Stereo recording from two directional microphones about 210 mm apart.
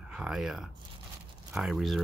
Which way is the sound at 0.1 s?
Centre (ahead or behind).